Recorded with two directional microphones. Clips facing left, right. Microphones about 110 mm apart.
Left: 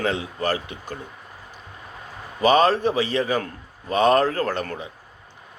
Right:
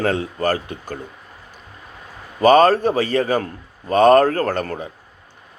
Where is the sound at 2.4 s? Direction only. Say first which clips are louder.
Right 5 dB; 50° right (ahead or behind).